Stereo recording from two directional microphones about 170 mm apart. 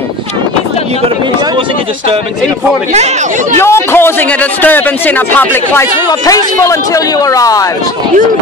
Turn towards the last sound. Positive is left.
turn(degrees=20)  # may be behind; listen again after turning